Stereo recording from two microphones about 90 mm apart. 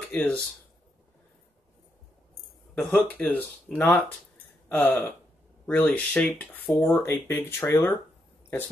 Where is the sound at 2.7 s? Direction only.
20° left (ahead or behind).